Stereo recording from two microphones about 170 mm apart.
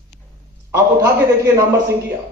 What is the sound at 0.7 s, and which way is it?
Speech, 15° right (ahead or behind).